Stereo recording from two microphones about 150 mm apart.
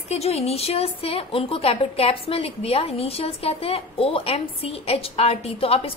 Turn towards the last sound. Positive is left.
turn(degrees=40)  # may be behind; listen again after turning